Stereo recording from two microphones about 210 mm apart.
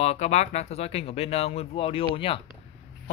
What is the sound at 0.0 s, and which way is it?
Speech, 30° left (ahead or behind).